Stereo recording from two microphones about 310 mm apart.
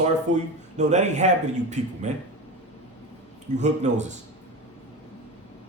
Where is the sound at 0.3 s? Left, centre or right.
Right.